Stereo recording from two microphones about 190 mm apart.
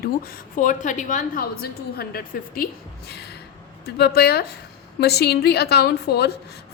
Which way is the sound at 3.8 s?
55° left (ahead or behind).